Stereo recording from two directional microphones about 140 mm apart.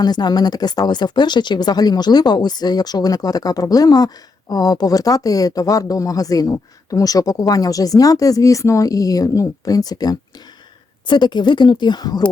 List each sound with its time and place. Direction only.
0.0 s speech: 30° left (ahead or behind)